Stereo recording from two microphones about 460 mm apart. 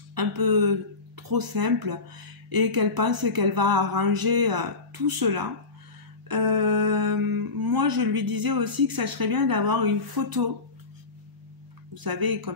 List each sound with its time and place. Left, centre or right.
0.1 s speech: right
11.9 s speech: right